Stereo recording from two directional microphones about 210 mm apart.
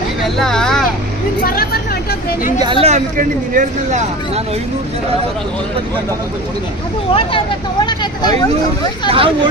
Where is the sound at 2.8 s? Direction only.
35° right (ahead or behind).